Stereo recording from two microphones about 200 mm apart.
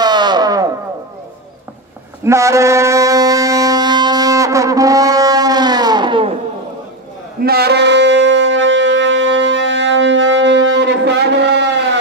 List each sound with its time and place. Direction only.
0.0 s music: 20° right (ahead or behind)
2.2 s wind instrument: 15° right (ahead or behind)
7.4 s wind instrument: 50° right (ahead or behind)